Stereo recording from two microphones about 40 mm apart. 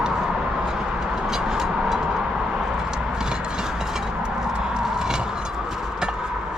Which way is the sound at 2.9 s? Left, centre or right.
Centre.